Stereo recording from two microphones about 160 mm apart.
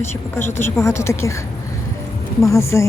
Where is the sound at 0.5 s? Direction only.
15° left (ahead or behind).